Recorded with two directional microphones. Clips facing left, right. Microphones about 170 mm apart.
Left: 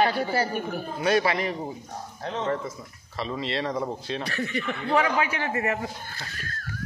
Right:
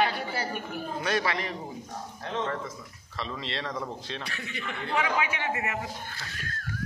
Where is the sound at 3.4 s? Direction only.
10° left (ahead or behind).